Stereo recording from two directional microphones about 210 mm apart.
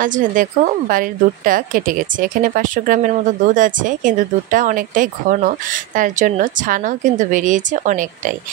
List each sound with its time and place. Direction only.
0.0 s a woman's voice: 40° right (ahead or behind)